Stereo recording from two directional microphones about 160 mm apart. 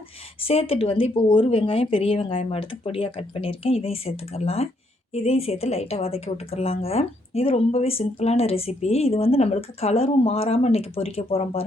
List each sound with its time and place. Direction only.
0.4 s a woman's voice: 35° left (ahead or behind)